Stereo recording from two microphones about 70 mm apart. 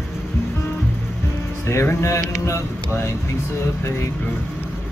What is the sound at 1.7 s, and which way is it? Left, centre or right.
Speech, left.